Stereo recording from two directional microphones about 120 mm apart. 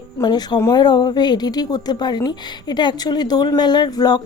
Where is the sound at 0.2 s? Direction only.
35° left (ahead or behind).